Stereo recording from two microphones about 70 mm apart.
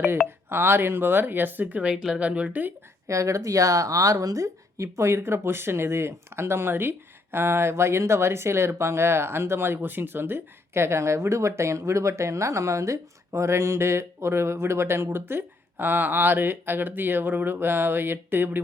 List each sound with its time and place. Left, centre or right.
0.3 s speech: right
1.9 s speech: centre
3.1 s speech: right